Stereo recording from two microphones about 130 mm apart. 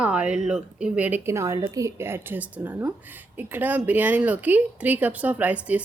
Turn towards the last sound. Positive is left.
turn(degrees=-10)  # may be behind; listen again after turning